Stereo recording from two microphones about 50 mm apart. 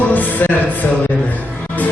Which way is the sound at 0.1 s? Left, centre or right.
Left.